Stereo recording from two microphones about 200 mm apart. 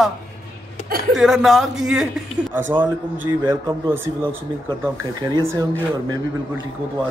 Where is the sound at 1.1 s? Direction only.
Centre (ahead or behind); by 4.3 s 15° right (ahead or behind).